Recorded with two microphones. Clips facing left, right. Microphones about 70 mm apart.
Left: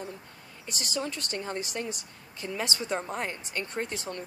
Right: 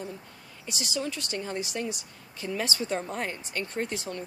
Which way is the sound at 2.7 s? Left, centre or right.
Left.